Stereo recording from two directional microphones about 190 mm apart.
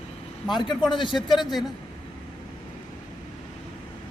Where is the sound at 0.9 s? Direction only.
25° left (ahead or behind).